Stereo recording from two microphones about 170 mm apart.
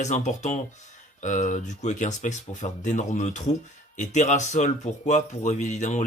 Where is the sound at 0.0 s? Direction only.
45° left (ahead or behind).